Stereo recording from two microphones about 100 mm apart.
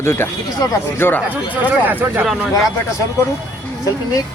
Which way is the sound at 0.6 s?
35° left (ahead or behind).